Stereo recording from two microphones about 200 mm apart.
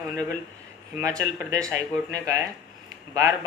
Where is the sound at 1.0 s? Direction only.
15° right (ahead or behind).